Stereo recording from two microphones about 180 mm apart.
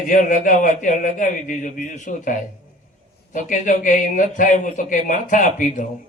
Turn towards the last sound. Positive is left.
turn(degrees=45)  # may be behind; listen again after turning